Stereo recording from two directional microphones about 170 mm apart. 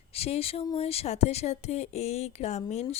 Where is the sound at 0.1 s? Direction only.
35° left (ahead or behind).